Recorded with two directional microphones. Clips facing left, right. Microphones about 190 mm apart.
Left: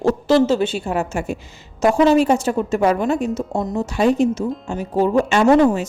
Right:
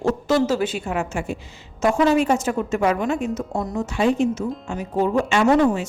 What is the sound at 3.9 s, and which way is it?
A woman's voice, 40° left (ahead or behind).